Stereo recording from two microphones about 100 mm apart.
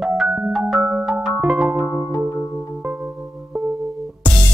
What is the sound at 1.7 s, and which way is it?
Music, 30° left (ahead or behind).